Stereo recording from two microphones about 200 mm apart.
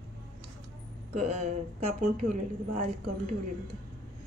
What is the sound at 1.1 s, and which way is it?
Speech, 35° right (ahead or behind).